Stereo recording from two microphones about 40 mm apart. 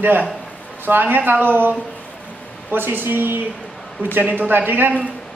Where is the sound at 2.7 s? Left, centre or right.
Right.